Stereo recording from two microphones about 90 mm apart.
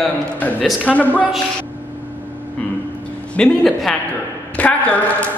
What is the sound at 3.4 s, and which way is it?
Speech, 10° left (ahead or behind).